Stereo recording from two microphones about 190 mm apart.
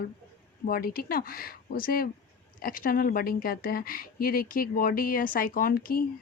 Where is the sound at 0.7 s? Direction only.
50° left (ahead or behind).